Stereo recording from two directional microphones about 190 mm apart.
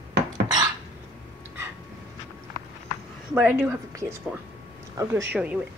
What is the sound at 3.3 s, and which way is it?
A woman's voice, 10° right (ahead or behind).